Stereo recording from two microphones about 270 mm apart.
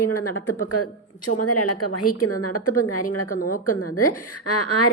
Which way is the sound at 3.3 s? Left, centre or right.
Left.